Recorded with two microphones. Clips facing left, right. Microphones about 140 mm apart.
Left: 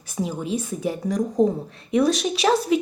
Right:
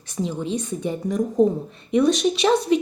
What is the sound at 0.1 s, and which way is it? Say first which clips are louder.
A woman's voice: even; 10° left (ahead or behind).